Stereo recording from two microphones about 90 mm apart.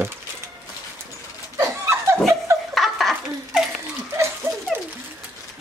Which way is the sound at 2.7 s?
Centre (ahead or behind).